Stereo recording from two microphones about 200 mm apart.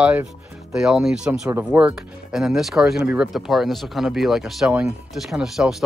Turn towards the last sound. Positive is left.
turn(degrees=0)  # may be behind; listen again after turning